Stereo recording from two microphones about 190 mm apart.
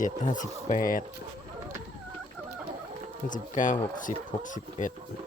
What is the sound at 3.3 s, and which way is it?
Speech, 40° left (ahead or behind).